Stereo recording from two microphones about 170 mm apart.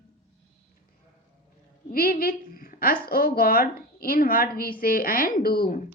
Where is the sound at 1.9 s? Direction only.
60° left (ahead or behind).